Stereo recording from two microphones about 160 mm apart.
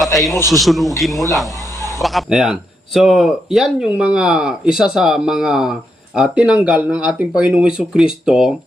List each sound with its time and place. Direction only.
0.5 s speech: centre (ahead or behind)
1.5 s a sound: 20° left (ahead or behind)
2.0 s speech: centre (ahead or behind)